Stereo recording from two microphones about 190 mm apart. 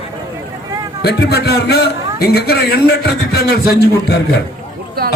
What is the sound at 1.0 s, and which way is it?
A man's voice, 60° left (ahead or behind).